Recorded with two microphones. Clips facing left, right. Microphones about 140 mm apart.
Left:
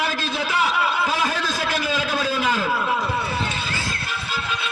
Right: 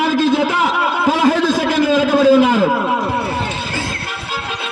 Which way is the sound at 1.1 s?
55° right (ahead or behind).